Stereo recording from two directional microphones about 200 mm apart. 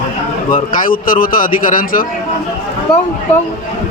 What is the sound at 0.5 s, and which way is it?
A man's voice, 45° left (ahead or behind).